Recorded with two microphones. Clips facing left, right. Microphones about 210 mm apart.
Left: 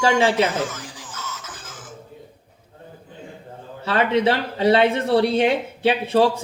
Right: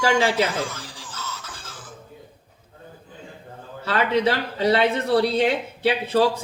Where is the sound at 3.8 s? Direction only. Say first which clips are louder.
Left 2 dB; 25° left (ahead or behind).